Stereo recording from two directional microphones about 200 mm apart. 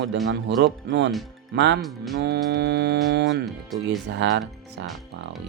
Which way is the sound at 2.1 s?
55° right (ahead or behind).